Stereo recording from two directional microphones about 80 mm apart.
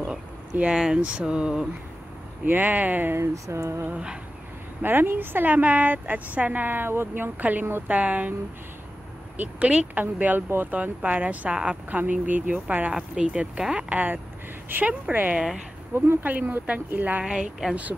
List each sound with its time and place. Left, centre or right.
0.0 s speech: centre
2.4 s a woman's voice: right
3.2 s speech: right
3.8 s speech: centre
4.8 s a woman's voice: right
9.4 s a woman's voice: centre
12.9 s a woman's voice: centre
17.2 s speech: centre